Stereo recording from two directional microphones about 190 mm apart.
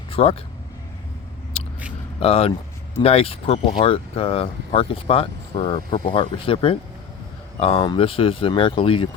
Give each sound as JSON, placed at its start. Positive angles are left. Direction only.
{"t": 0.1, "sound": "speech", "side_deg": 30}
{"t": 1.5, "sound": "a sound", "side_deg": 30}
{"t": 2.2, "sound": "speech", "side_deg": 30}